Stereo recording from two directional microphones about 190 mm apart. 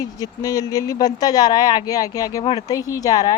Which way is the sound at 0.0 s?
20° left (ahead or behind).